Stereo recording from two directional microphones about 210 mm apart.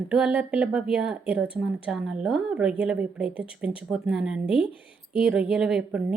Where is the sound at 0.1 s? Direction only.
5° right (ahead or behind).